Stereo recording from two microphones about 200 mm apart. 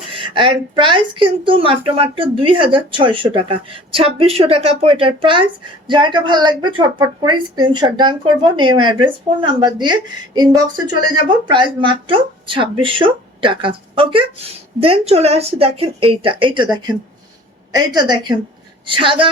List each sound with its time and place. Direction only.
0.1 s a woman's voice: 25° right (ahead or behind)